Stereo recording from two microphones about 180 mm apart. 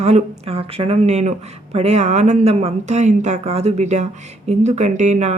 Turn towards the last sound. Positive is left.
turn(degrees=-40)  # may be behind; listen again after turning